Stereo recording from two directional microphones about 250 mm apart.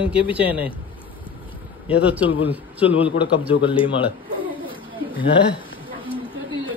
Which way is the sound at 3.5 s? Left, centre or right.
Centre.